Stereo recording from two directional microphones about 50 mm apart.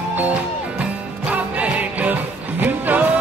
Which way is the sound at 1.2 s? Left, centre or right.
Right.